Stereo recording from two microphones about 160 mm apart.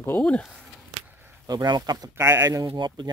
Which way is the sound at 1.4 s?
25° right (ahead or behind).